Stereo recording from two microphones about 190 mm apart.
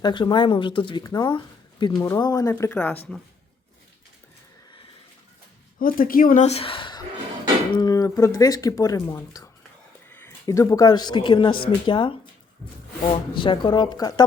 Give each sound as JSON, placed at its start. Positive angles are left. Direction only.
{"t": 0.0, "sound": "speech", "side_deg": 25}
{"t": 5.8, "sound": "speech", "side_deg": 50}